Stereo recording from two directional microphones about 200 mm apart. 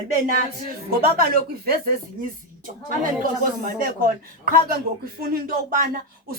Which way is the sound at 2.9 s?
45° right (ahead or behind).